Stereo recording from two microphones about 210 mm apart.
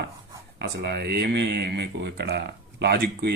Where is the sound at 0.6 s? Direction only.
50° right (ahead or behind).